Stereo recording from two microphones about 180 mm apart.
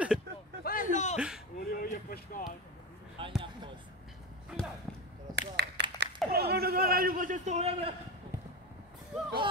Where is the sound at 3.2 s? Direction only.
30° right (ahead or behind).